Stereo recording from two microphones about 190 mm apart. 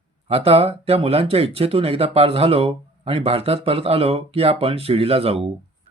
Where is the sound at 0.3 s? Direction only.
30° right (ahead or behind).